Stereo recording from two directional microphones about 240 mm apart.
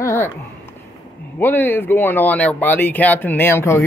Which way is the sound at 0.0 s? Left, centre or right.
Centre.